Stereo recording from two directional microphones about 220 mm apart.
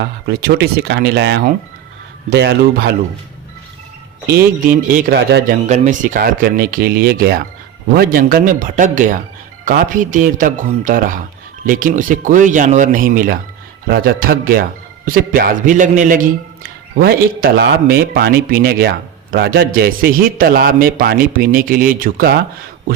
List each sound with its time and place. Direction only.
0.0 s speech: 50° right (ahead or behind)
4.6 s a man's voice: 40° right (ahead or behind)
5.6 s a man's voice: 30° right (ahead or behind)